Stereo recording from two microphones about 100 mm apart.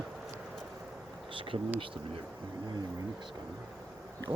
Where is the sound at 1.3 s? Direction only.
60° right (ahead or behind).